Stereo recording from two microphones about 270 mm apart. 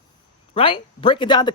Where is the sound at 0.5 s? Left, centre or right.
Centre.